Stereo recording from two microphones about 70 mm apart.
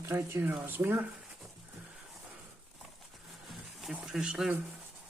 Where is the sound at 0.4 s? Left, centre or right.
Right.